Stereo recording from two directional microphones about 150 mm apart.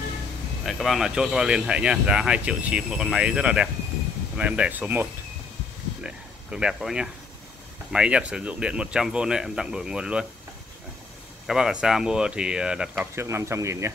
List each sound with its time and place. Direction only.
0.7 s speech: centre (ahead or behind)
6.0 s speech: 5° right (ahead or behind)
11.4 s speech: 5° right (ahead or behind)
13.1 s speech: 15° right (ahead or behind)